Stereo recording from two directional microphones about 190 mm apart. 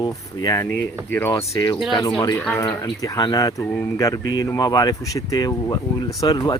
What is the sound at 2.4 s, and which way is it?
Speech, 10° left (ahead or behind).